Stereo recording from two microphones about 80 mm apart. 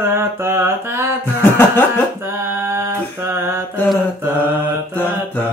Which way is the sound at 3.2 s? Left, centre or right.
Right.